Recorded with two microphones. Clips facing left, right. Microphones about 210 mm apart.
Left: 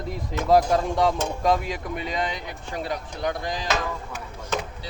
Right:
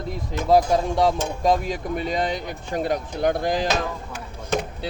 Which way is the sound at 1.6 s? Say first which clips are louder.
Right 4 dB; 40° right (ahead or behind).